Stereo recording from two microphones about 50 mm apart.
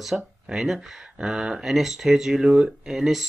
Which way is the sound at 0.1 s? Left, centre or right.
Centre.